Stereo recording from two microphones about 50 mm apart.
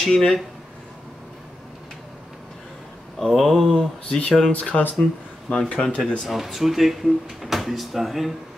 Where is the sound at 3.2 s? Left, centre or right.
Centre.